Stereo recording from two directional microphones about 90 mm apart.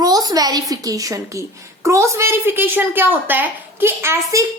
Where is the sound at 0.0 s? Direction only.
45° right (ahead or behind).